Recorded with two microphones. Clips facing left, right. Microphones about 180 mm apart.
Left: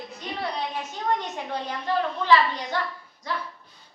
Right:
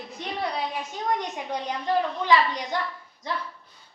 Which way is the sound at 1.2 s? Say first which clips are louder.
Right 1 dB; 15° right (ahead or behind).